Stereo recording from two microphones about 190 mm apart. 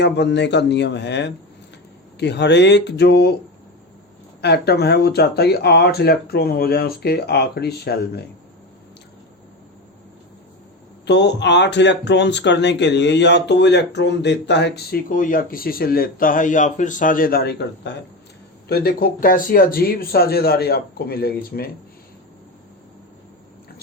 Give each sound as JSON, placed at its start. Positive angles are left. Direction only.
{"t": 0.0, "sound": "speech", "side_deg": 65}
{"t": 4.4, "sound": "speech", "side_deg": 60}
{"t": 11.0, "sound": "speech", "side_deg": 65}